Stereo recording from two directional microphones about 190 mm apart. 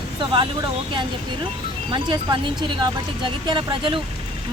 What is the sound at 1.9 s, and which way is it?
Speech, 25° right (ahead or behind).